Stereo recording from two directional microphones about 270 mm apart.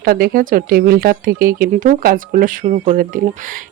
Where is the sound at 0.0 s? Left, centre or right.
Right.